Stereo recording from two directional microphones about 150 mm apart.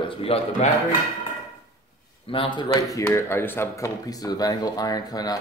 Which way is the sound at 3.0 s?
15° left (ahead or behind).